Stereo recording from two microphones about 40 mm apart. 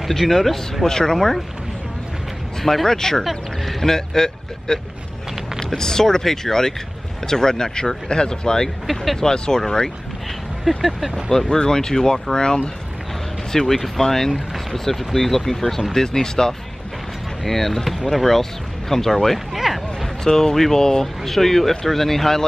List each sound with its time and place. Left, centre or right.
0.1 s speech: centre
0.8 s speech: centre
2.6 s speech: centre
8.8 s speech: centre
9.2 s speech: centre
10.8 s speech: centre
11.4 s speech: centre
19.3 s a sound: centre
20.2 s speech: centre